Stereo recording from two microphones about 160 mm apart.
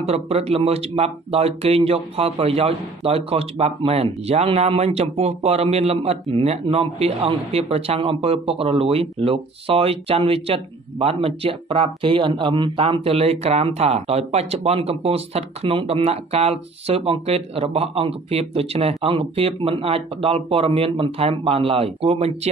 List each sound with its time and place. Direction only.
0.0 s speech: 40° right (ahead or behind)